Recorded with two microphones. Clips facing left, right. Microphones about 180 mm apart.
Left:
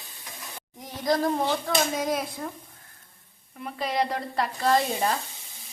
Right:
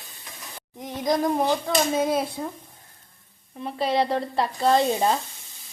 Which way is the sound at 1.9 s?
30° right (ahead or behind).